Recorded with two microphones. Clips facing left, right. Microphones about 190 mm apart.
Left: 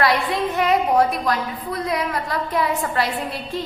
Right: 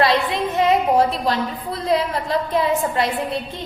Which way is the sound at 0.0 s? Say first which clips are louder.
Right 1 dB; 25° right (ahead or behind).